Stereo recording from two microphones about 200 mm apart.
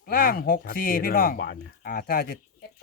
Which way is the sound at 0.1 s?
45° left (ahead or behind).